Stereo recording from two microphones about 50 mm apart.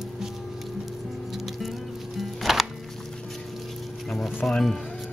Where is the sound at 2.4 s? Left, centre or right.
Centre.